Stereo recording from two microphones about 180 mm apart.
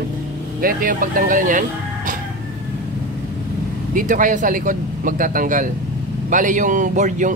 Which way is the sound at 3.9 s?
45° right (ahead or behind).